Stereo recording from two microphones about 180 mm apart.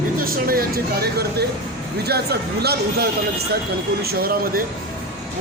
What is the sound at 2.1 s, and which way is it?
Speech, 65° right (ahead or behind).